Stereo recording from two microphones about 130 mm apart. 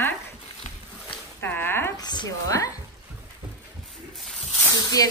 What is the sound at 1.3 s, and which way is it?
Speech, 15° left (ahead or behind).